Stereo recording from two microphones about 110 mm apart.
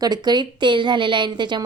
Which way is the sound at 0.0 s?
40° right (ahead or behind).